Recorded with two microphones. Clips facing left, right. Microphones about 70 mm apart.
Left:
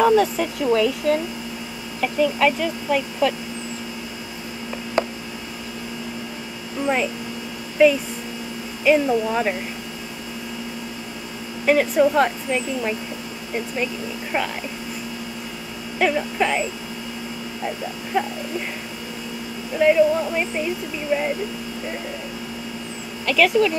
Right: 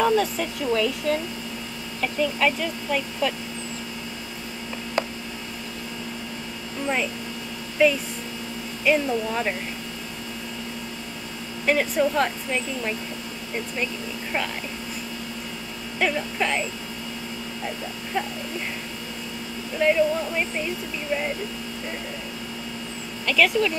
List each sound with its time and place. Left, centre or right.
0.0 s speech: centre
5.0 s a sound: centre
7.8 s speech: centre
11.6 s speech: centre
16.0 s speech: centre
18.1 s speech: centre
19.8 s speech: centre
23.2 s speech: centre